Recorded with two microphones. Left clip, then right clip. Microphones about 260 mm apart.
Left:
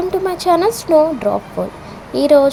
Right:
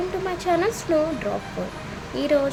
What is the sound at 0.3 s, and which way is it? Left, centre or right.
Speech, centre.